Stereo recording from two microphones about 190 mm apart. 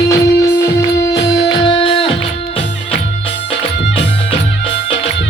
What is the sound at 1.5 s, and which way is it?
Music, 25° left (ahead or behind).